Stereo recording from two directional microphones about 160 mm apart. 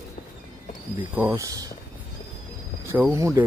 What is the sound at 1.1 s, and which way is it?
Speech, 15° right (ahead or behind).